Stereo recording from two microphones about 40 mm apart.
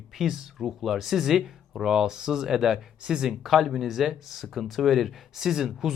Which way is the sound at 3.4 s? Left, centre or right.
Centre.